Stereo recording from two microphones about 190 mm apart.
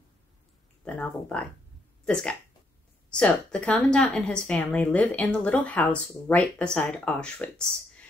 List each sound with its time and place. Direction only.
0.8 s a woman's voice: 5° left (ahead or behind)